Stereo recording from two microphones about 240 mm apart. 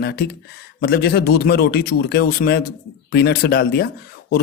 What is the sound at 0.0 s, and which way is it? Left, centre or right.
Speech, left.